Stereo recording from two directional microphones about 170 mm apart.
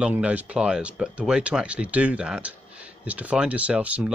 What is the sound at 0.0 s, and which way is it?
Speech, 10° right (ahead or behind).